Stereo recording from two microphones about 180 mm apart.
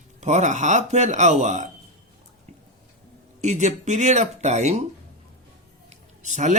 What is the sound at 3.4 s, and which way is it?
Speech, 40° right (ahead or behind).